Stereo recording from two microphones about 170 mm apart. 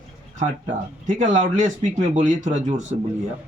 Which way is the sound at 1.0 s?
45° right (ahead or behind).